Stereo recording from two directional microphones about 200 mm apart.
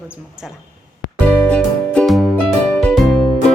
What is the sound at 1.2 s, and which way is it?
Music, 5° left (ahead or behind).